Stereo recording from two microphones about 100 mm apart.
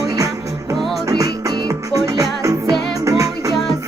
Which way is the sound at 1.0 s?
40° right (ahead or behind).